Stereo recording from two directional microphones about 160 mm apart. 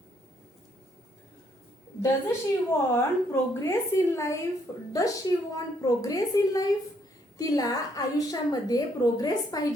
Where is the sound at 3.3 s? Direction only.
15° left (ahead or behind).